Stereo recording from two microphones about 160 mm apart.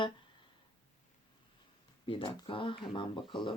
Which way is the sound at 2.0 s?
30° left (ahead or behind).